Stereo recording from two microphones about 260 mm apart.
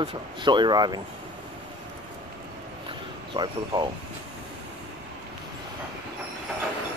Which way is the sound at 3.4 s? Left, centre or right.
Centre.